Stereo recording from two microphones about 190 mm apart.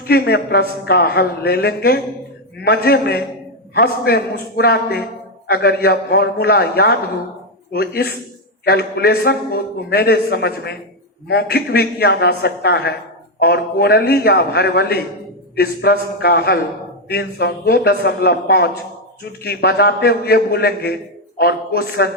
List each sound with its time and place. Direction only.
0.1 s a man's voice: 55° left (ahead or behind)